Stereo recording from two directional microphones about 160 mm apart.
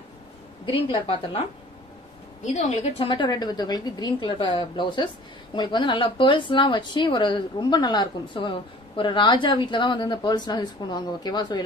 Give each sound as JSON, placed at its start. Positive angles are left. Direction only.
{"t": 0.7, "sound": "a woman's voice", "side_deg": 35}
{"t": 2.4, "sound": "a woman's voice", "side_deg": 45}